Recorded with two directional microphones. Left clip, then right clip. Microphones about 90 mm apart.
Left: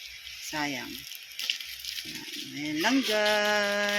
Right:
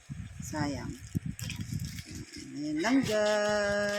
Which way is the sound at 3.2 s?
25° right (ahead or behind).